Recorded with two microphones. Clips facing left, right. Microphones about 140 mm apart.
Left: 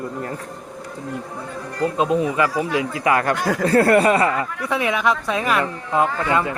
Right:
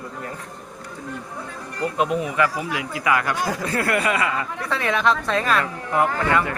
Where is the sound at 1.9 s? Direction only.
25° left (ahead or behind).